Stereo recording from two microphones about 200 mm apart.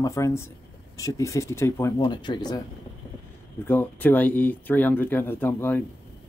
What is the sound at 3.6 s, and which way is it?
Speech, 10° left (ahead or behind).